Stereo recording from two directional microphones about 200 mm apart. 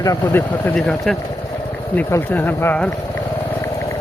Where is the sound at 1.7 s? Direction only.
10° left (ahead or behind).